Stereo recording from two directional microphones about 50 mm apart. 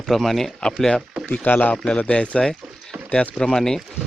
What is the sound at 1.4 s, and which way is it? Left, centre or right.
Speech, left.